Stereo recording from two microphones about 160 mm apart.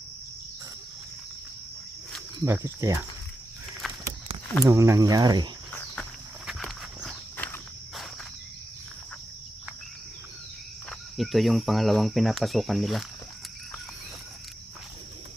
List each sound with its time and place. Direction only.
2.4 s cricket: 20° right (ahead or behind)
4.6 s speech: 20° right (ahead or behind)
6.5 s dog: centre (ahead or behind)
7.3 s walk: 15° left (ahead or behind)
11.2 s speech: centre (ahead or behind)